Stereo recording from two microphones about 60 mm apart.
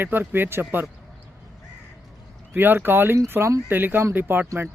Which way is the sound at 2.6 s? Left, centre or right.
Right.